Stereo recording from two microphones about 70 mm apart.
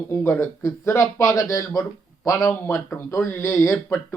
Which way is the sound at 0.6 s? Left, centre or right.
Left.